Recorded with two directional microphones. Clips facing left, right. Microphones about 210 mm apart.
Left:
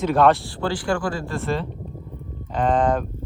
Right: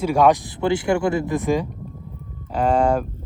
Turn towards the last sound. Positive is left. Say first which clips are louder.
# right 1 dB
turn(degrees=-10)  # may be behind; listen again after turning